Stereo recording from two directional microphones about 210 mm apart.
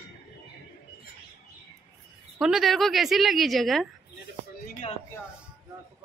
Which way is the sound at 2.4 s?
Centre (ahead or behind).